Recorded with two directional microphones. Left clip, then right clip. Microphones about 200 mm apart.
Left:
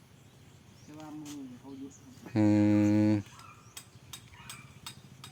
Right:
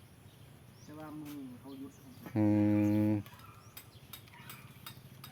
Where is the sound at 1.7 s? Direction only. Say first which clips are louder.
Left 2 dB; 25° right (ahead or behind).